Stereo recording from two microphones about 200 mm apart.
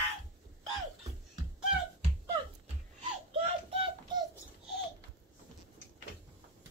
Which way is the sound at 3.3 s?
30° right (ahead or behind).